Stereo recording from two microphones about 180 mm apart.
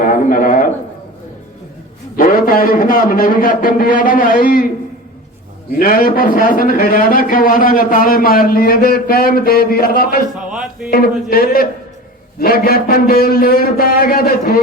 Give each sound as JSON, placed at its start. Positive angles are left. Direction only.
{"t": 0.3, "sound": "speech", "side_deg": 50}
{"t": 2.1, "sound": "speech", "side_deg": 50}
{"t": 5.8, "sound": "speech", "side_deg": 55}
{"t": 10.5, "sound": "music", "side_deg": -5}
{"t": 10.9, "sound": "a man's voice", "side_deg": 60}